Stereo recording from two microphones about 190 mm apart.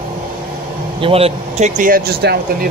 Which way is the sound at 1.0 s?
30° right (ahead or behind).